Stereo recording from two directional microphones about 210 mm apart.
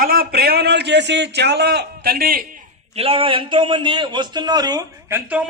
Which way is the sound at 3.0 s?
25° right (ahead or behind).